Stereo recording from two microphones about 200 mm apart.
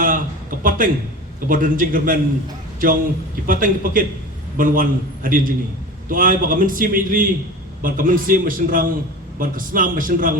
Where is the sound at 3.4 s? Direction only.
45° right (ahead or behind).